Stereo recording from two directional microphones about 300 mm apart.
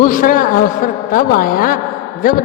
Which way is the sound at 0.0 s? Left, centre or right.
Left.